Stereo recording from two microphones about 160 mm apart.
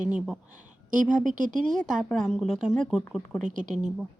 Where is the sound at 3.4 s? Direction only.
50° right (ahead or behind).